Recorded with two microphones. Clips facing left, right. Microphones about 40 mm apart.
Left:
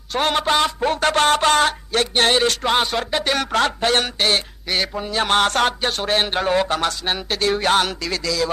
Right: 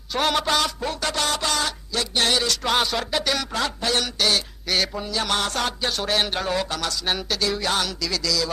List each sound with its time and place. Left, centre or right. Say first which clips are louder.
0.1 s speech: left 3 dB; left
3.3 s speech: left 6 dB; left
4.7 s speech: left 2 dB; centre
5.1 s speech: left 8 dB; left